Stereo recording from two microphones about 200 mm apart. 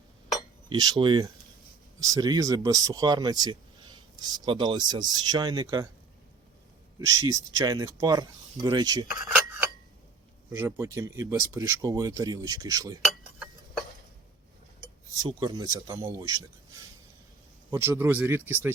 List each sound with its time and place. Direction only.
0.7 s speech: 20° right (ahead or behind)
7.2 s speech: 15° right (ahead or behind)
9.0 s speech: 45° left (ahead or behind)
10.5 s speech: 10° right (ahead or behind)
15.2 s speech: 20° right (ahead or behind)
17.7 s speech: 10° right (ahead or behind)